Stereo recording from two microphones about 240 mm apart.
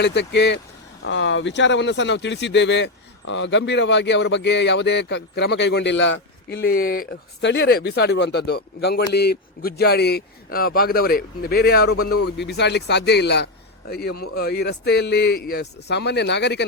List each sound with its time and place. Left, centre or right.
0.0 s speech: left